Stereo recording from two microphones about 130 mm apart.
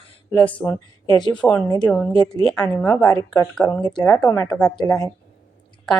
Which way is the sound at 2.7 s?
15° left (ahead or behind).